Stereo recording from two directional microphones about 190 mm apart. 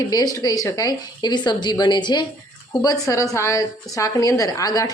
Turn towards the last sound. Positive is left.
turn(degrees=20)  # may be behind; listen again after turning